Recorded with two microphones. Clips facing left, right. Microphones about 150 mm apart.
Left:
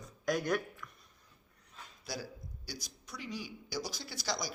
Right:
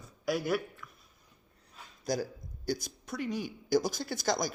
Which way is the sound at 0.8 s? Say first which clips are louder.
Even; 5° right (ahead or behind).